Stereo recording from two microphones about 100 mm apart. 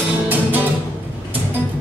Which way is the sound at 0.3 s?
20° right (ahead or behind).